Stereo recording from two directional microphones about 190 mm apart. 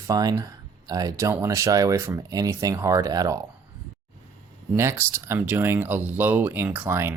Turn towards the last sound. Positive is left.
turn(degrees=-10)  # may be behind; listen again after turning